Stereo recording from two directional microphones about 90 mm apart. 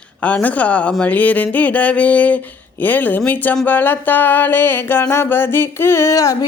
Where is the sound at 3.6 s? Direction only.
20° left (ahead or behind).